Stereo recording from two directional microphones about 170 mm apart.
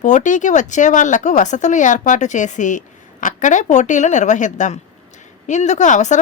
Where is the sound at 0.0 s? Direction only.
45° left (ahead or behind).